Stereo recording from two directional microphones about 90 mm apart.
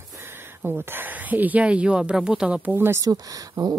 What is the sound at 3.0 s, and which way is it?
Speech, 40° right (ahead or behind).